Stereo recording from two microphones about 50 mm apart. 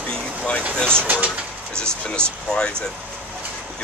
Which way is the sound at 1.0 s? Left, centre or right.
Right.